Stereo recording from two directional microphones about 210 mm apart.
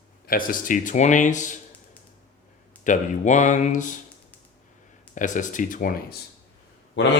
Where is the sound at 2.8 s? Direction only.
35° left (ahead or behind).